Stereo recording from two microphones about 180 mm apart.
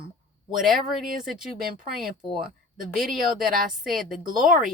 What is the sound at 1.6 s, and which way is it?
Speech, 55° right (ahead or behind).